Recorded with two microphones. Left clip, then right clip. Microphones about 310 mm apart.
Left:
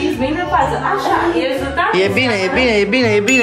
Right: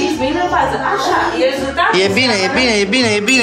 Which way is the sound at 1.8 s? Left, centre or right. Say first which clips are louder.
Right 2 dB; centre.